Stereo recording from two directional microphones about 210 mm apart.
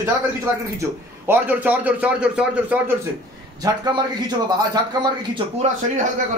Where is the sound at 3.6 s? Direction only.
20° right (ahead or behind).